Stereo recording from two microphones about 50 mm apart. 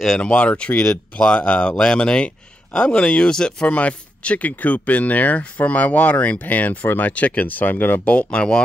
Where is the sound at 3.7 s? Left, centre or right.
Left.